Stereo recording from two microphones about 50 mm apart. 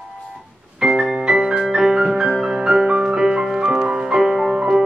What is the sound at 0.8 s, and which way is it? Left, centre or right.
Music, centre.